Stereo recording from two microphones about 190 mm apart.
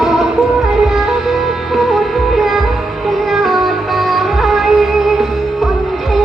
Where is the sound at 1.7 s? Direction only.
Centre (ahead or behind).